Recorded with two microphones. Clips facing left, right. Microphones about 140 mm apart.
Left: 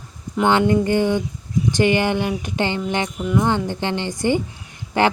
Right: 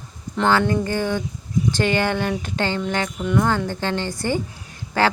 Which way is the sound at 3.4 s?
20° left (ahead or behind).